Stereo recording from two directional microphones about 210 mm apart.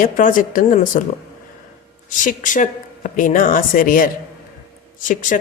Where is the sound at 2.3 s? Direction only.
40° left (ahead or behind).